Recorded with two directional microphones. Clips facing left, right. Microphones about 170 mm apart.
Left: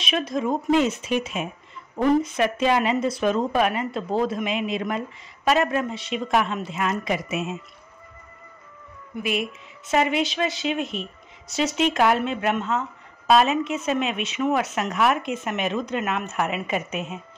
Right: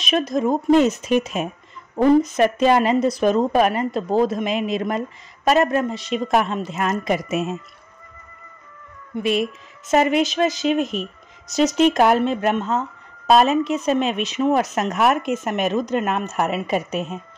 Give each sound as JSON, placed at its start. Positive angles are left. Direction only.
{"t": 0.0, "sound": "a woman's voice", "side_deg": -40}
{"t": 9.1, "sound": "a woman's voice", "side_deg": -35}